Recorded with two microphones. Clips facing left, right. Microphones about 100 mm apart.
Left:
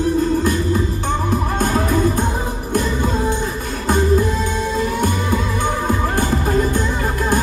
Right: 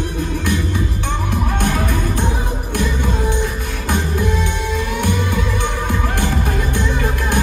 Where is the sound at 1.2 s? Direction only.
40° left (ahead or behind).